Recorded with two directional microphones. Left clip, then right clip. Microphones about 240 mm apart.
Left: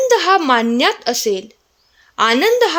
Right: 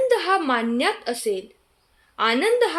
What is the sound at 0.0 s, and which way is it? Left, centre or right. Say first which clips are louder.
A woman's voice: left 7 dB; left.